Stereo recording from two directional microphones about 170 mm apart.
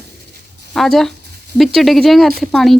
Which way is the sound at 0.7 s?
Centre (ahead or behind).